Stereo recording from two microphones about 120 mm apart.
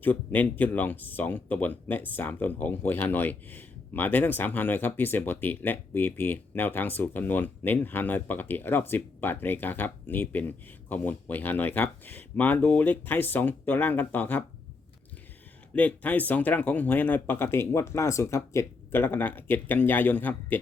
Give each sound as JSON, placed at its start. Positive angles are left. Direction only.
{"t": 0.0, "sound": "speech", "side_deg": 15}
{"t": 15.7, "sound": "speech", "side_deg": 10}